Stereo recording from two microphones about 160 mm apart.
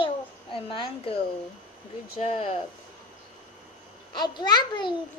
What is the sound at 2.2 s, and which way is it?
Speech, 45° left (ahead or behind).